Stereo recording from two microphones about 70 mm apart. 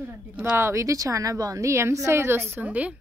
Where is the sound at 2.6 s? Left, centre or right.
Centre.